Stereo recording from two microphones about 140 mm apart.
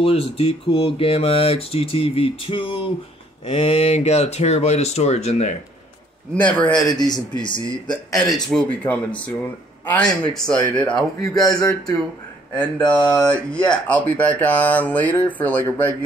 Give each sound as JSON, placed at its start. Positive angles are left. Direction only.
{"t": 0.0, "sound": "speech", "side_deg": 45}
{"t": 6.3, "sound": "speech", "side_deg": 10}
{"t": 7.1, "sound": "speech", "side_deg": 30}
{"t": 7.9, "sound": "a man's voice", "side_deg": 5}
{"t": 11.4, "sound": "speech", "side_deg": 25}
{"t": 12.7, "sound": "speech", "side_deg": 10}